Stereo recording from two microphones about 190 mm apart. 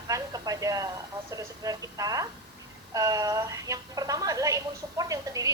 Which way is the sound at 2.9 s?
20° right (ahead or behind).